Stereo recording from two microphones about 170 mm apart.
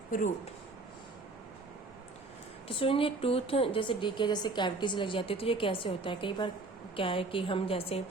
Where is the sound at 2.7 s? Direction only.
30° left (ahead or behind).